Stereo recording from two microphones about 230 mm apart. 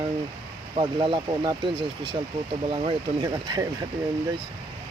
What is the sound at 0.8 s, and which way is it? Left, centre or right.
Speech, right.